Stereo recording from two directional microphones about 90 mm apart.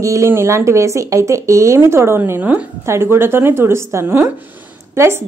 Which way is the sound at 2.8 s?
30° right (ahead or behind).